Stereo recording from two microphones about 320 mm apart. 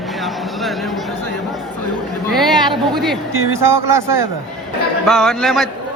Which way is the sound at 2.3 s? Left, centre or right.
Centre.